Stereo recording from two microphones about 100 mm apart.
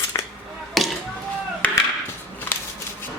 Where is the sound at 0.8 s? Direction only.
Centre (ahead or behind).